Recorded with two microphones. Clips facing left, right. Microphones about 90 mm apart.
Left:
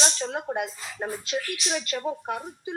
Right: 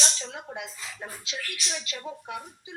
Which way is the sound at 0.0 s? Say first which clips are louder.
Left 7 dB; 50° left (ahead or behind).